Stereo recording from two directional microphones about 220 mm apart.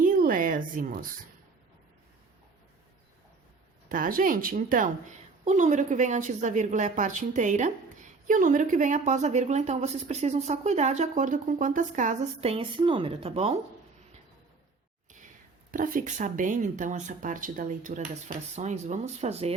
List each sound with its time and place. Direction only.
0.0 s a sound: 40° right (ahead or behind)
3.8 s a woman's voice: 40° right (ahead or behind)
15.7 s a woman's voice: 40° right (ahead or behind)